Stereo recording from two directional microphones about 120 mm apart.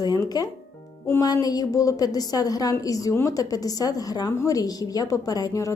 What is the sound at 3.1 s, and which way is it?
Speech, 20° left (ahead or behind).